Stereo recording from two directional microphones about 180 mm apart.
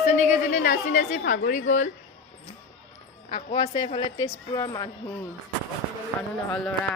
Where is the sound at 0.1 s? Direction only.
45° left (ahead or behind).